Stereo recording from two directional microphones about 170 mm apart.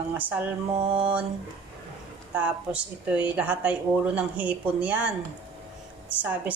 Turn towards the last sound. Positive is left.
turn(degrees=-10)  # may be behind; listen again after turning